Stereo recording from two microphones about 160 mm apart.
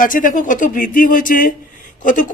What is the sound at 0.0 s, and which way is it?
Speech, 55° left (ahead or behind).